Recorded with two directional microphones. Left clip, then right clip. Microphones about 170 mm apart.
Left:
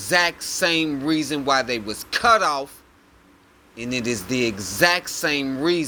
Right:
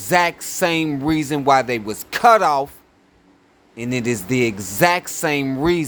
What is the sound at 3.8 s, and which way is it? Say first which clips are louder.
A man's voice: right 3 dB; 40° right (ahead or behind).